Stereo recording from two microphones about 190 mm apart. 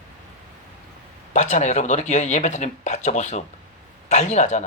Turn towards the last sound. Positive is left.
turn(degrees=40)  # may be behind; listen again after turning